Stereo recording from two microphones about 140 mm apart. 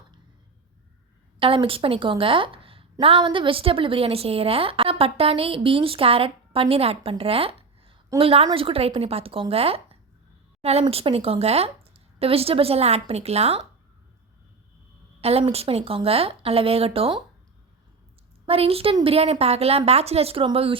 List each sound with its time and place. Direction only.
1.4 s a woman's voice: 40° right (ahead or behind)
15.2 s speech: 45° right (ahead or behind)
18.4 s speech: 45° right (ahead or behind)